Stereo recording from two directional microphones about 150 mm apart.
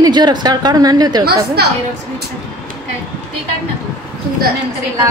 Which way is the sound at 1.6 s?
90° right.